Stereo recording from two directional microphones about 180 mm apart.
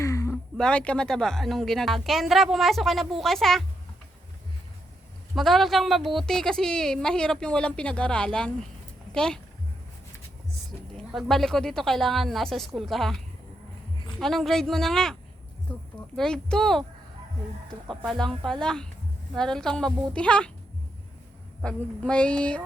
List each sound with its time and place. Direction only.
0.0 s a sound: 15° left (ahead or behind)
0.5 s a woman's voice: 5° left (ahead or behind)
5.3 s a woman's voice: centre (ahead or behind)
10.9 s a woman's voice: centre (ahead or behind)
14.2 s a woman's voice: centre (ahead or behind)
17.8 s a woman's voice: centre (ahead or behind)
21.6 s a woman's voice: 5° left (ahead or behind)